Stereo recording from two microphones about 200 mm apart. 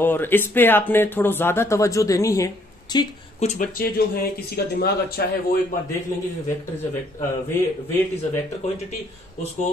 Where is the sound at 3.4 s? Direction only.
40° left (ahead or behind).